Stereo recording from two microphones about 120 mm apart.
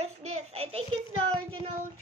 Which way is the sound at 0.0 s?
65° right (ahead or behind).